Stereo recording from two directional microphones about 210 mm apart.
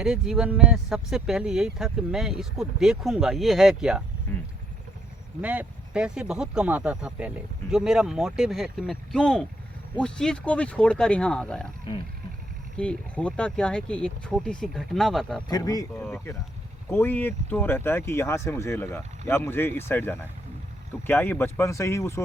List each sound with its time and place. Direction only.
0.0 s speech: centre (ahead or behind)
5.4 s speech: 5° right (ahead or behind)
12.7 s speech: 5° left (ahead or behind)
15.4 s speech: 15° left (ahead or behind)